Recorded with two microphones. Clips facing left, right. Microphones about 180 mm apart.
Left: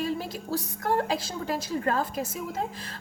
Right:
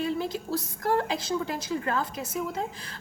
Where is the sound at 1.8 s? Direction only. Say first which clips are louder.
Left 2 dB; 45° left (ahead or behind).